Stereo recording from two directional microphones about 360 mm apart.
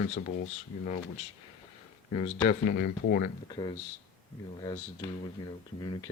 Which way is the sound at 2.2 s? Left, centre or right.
Left.